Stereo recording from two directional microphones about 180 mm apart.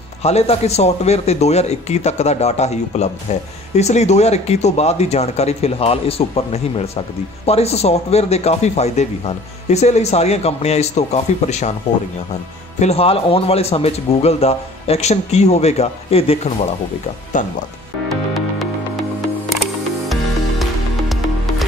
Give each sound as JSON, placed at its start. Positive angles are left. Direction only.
{"t": 0.2, "sound": "a man's voice", "side_deg": 35}
{"t": 12.7, "sound": "a man's voice", "side_deg": 35}
{"t": 17.4, "sound": "speech", "side_deg": 45}
{"t": 18.0, "sound": "music", "side_deg": 0}